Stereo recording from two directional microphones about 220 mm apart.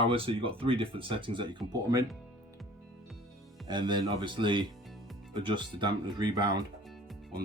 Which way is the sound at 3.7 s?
20° right (ahead or behind).